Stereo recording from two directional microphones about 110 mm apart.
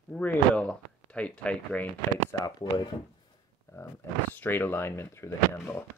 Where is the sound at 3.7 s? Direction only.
30° left (ahead or behind).